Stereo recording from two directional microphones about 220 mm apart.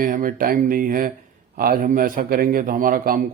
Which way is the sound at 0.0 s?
40° right (ahead or behind).